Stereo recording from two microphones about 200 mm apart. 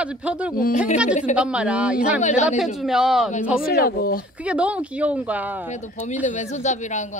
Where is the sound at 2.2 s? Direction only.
35° left (ahead or behind).